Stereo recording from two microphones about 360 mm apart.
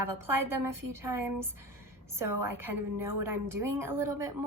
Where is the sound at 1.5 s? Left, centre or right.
Right.